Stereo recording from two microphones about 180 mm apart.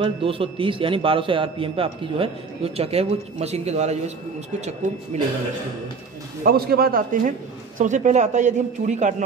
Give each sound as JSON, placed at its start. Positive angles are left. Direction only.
{"t": 0.0, "sound": "a man's voice", "side_deg": -30}
{"t": 5.1, "sound": "a man's voice", "side_deg": -40}
{"t": 6.4, "sound": "a man's voice", "side_deg": -55}